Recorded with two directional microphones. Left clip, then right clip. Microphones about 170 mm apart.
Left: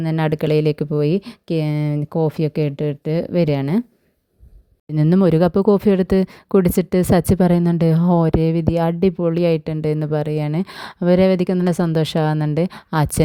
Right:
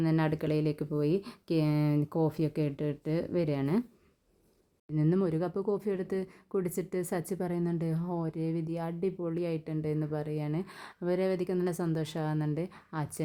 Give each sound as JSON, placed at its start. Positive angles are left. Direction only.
{"t": 0.0, "sound": "speech", "side_deg": 40}
{"t": 4.9, "sound": "speech", "side_deg": 50}